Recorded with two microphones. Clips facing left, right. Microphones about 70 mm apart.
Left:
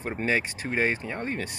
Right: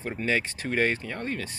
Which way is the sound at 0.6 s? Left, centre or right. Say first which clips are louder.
Even; centre.